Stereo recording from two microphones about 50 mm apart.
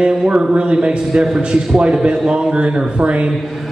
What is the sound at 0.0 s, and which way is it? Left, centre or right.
A man's voice, right.